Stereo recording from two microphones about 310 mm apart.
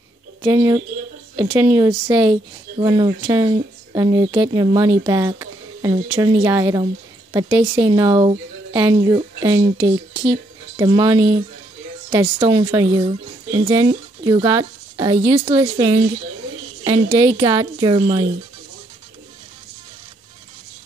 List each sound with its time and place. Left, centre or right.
0.4 s speech: centre